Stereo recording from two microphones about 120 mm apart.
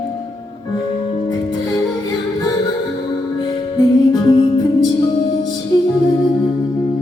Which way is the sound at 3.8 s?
30° left (ahead or behind).